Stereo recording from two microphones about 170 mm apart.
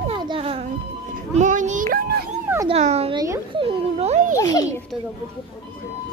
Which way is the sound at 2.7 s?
40° right (ahead or behind).